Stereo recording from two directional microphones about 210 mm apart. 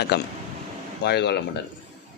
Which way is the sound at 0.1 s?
55° left (ahead or behind).